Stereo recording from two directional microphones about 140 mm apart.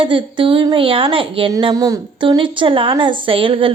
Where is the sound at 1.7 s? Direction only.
25° right (ahead or behind).